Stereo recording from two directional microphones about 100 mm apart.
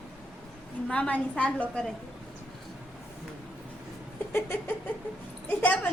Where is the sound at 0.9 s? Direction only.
10° left (ahead or behind).